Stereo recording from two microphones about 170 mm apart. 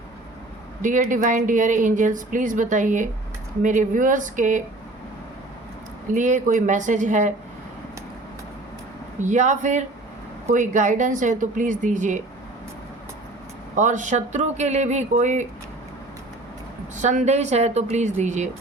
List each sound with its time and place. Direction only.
0.8 s speech: 50° right (ahead or behind)
6.1 s speech: 45° right (ahead or behind)
9.2 s speech: 45° right (ahead or behind)
13.7 s speech: 45° right (ahead or behind)
16.9 s speech: 45° right (ahead or behind)